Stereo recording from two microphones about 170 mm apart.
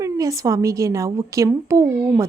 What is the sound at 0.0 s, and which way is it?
A woman's voice, 20° right (ahead or behind).